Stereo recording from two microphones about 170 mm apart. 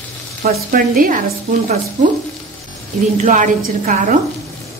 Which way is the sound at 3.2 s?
50° right (ahead or behind).